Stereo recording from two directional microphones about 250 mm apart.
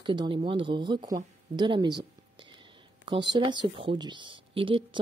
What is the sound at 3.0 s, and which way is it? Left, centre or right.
Speech, centre.